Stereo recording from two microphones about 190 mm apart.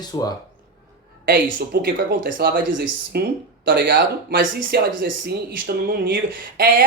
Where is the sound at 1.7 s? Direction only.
55° right (ahead or behind).